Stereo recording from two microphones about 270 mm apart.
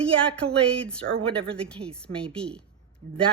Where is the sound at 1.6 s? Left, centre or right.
Centre.